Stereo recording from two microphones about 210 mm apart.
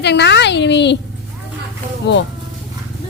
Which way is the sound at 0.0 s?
55° left (ahead or behind).